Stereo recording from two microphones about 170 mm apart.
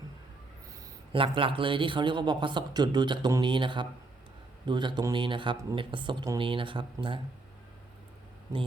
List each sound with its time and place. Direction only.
1.1 s a man's voice: 30° right (ahead or behind)